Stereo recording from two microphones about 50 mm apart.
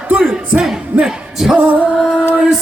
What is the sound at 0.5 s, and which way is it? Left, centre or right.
Music, right.